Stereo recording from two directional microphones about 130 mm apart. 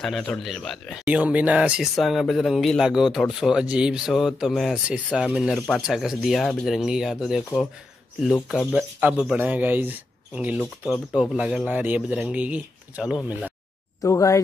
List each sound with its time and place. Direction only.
0.0 s speech: centre (ahead or behind)
1.0 s speech: 10° right (ahead or behind)
8.5 s speech: centre (ahead or behind)
10.9 s a man's voice: centre (ahead or behind)
14.0 s speech: 25° left (ahead or behind)